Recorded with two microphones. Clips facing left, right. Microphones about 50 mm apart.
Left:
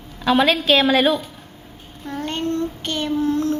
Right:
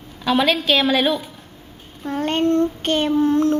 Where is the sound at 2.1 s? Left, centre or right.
Right.